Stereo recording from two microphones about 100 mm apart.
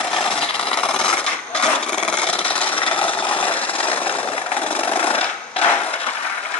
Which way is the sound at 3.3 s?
15° left (ahead or behind).